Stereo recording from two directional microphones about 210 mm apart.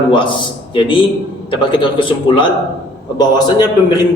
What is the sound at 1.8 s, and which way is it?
A man's voice, 25° left (ahead or behind).